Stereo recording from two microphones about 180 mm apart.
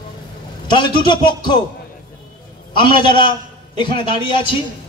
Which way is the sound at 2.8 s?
25° left (ahead or behind).